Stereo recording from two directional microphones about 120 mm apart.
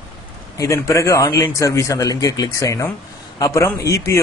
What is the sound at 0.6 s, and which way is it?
Speech, 25° left (ahead or behind).